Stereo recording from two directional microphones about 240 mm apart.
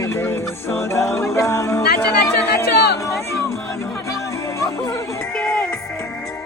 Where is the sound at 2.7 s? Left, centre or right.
Left.